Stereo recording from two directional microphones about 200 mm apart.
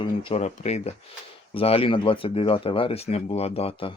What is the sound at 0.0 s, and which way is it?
Speech, 25° left (ahead or behind).